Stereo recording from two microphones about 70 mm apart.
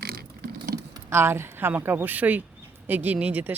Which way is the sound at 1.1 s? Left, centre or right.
Right.